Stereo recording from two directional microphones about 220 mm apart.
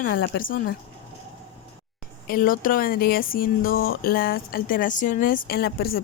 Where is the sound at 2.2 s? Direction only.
40° left (ahead or behind).